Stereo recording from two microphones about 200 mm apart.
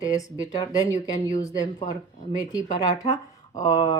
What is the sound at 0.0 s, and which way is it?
A woman's voice, 15° left (ahead or behind).